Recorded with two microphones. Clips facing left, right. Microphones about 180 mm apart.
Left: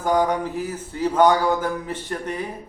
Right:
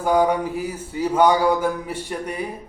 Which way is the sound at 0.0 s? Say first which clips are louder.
Right 2 dB; 10° right (ahead or behind).